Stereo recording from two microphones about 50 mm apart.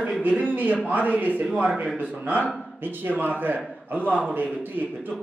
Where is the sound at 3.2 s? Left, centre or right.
Right.